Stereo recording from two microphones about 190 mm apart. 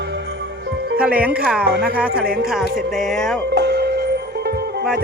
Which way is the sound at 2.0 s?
50° right (ahead or behind).